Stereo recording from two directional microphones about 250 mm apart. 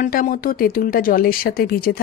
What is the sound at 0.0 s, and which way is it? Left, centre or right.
Speech, left.